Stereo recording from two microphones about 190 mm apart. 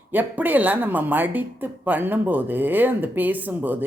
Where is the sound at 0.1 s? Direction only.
10° right (ahead or behind).